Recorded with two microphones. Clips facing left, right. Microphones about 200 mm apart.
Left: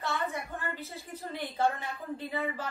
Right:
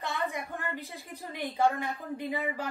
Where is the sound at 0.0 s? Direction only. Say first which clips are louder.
Even; 15° right (ahead or behind).